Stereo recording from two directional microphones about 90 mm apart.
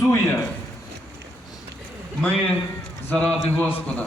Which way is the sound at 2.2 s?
15° left (ahead or behind).